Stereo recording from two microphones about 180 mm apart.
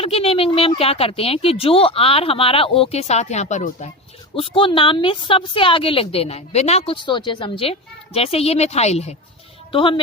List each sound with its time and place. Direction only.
0.0 s a woman's voice: 30° left (ahead or behind)
4.4 s a woman's voice: 30° left (ahead or behind)